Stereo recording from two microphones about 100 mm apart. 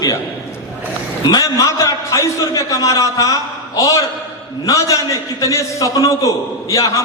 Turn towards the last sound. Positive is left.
turn(degrees=35)  # may be behind; listen again after turning